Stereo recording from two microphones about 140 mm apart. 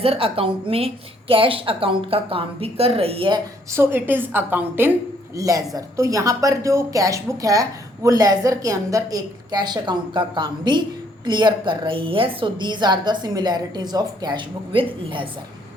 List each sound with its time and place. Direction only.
0.0 s a woman's voice: 40° right (ahead or behind)
3.7 s a woman's voice: 15° right (ahead or behind)
5.4 s a woman's voice: 25° right (ahead or behind)